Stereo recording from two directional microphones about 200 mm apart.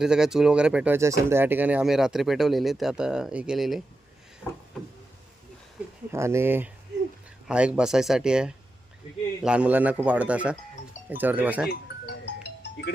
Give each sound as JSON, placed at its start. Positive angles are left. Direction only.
{"t": 0.0, "sound": "speech", "side_deg": -5}
{"t": 6.1, "sound": "speech", "side_deg": -15}
{"t": 11.7, "sound": "music", "side_deg": 60}